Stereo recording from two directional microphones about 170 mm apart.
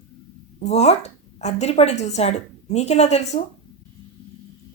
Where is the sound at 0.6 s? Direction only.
40° left (ahead or behind).